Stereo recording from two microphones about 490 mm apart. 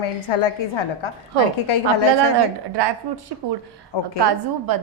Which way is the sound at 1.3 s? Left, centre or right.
Right.